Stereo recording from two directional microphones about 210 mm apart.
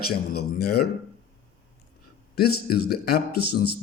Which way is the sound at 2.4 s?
50° left (ahead or behind).